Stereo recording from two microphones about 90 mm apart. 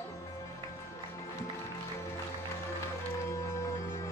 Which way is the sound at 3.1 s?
35° left (ahead or behind).